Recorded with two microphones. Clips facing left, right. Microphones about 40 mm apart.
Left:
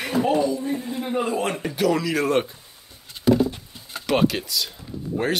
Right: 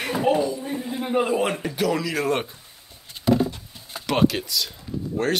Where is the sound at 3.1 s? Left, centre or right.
Centre.